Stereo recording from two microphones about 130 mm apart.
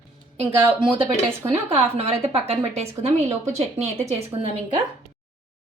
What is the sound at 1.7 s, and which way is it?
Speech, 50° right (ahead or behind).